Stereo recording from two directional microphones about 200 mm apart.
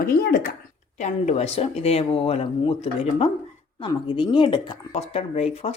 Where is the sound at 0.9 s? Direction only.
35° left (ahead or behind).